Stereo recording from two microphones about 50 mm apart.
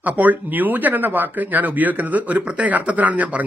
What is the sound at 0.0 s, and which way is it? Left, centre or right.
Speech, right.